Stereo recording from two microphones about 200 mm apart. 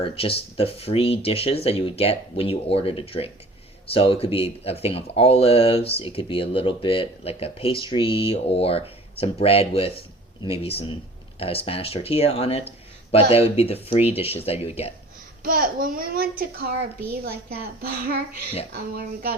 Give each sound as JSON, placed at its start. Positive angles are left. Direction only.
{"t": 0.0, "sound": "speech", "side_deg": 30}
{"t": 15.4, "sound": "a child's voice", "side_deg": -45}